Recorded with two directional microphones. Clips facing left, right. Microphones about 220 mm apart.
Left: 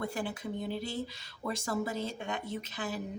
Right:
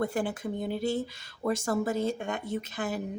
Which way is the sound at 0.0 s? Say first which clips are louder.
Right 6 dB; 50° right (ahead or behind).